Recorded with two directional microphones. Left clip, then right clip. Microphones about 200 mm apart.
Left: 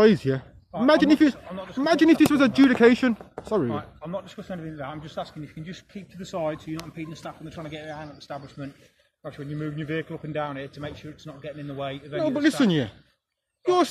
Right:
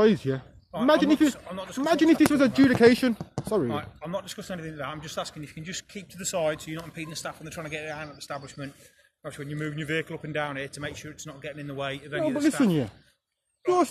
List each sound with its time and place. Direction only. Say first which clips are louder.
0.0 s speech: left 3 dB; 10° left (ahead or behind)
1.3 s speech: even; 10° right (ahead or behind)
1.8 s speech: left 2 dB; 5° left (ahead or behind)
3.7 s speech: even; 10° right (ahead or behind)